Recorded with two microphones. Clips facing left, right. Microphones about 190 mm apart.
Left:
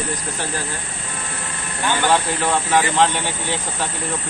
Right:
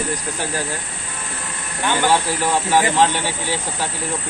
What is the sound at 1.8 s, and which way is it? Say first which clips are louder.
Speech: right 1 dB; 10° right (ahead or behind).